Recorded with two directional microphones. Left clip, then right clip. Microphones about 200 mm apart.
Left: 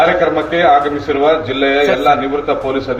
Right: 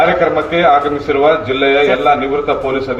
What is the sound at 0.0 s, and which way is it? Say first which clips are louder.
A man's voice: even; 30° right (ahead or behind).